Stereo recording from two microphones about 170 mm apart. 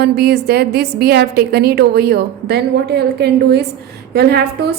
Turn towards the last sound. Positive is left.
turn(degrees=-70)  # may be behind; listen again after turning